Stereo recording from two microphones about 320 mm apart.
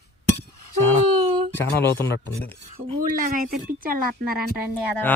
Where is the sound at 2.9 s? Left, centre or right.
Right.